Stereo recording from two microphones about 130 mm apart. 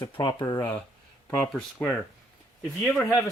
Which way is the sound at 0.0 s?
35° left (ahead or behind).